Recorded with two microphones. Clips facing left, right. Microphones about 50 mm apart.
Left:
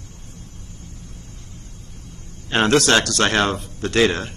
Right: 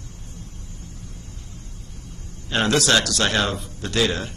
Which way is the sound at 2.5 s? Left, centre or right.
Left.